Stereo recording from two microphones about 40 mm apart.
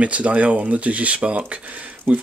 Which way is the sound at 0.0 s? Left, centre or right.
Right.